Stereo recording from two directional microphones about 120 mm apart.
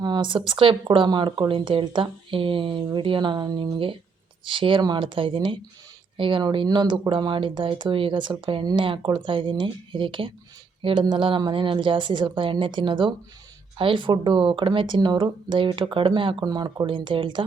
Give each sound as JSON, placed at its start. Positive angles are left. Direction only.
{"t": 0.0, "sound": "speech", "side_deg": -40}